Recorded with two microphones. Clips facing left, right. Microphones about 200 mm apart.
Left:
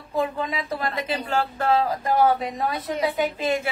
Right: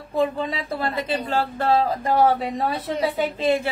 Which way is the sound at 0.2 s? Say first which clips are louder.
Right 3 dB; 30° right (ahead or behind).